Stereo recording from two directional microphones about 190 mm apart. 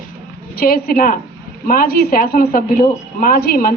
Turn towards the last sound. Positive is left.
turn(degrees=50)  # may be behind; listen again after turning